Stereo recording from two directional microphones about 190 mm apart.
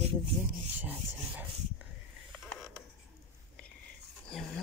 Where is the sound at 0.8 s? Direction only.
10° right (ahead or behind).